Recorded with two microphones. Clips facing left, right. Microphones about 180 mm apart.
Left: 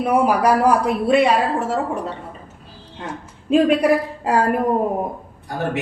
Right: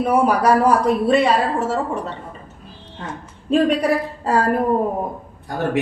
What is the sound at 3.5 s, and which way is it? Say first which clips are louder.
Speech: left 2 dB; 10° left (ahead or behind).